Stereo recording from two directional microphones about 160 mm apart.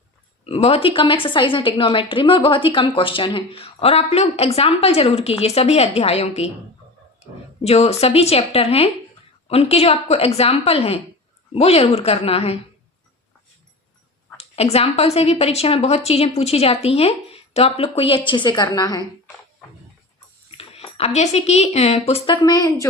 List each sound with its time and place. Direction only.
0.4 s a woman's voice: 40° left (ahead or behind)
14.3 s a woman's voice: 40° left (ahead or behind); by 19.0 s 25° left (ahead or behind)
20.6 s speech: 40° left (ahead or behind)
22.4 s a woman's voice: 25° left (ahead or behind)